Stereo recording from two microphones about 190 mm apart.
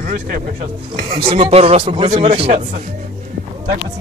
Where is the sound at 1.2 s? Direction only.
30° right (ahead or behind).